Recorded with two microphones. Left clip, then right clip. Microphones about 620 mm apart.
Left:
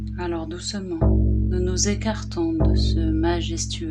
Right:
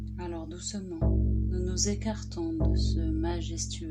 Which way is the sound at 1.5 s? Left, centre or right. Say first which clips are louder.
Left 8 dB; left.